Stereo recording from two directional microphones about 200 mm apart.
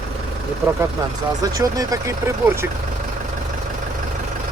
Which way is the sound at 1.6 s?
15° right (ahead or behind).